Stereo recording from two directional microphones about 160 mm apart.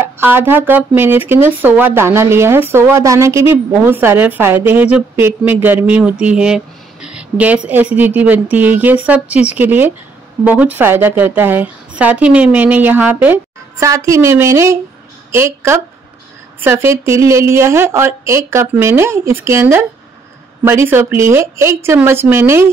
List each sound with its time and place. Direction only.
0.0 s speech: 15° right (ahead or behind)